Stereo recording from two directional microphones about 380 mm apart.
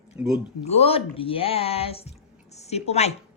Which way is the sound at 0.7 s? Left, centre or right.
Centre.